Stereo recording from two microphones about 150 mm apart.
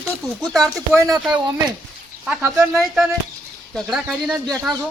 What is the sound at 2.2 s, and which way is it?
Speech, 15° right (ahead or behind).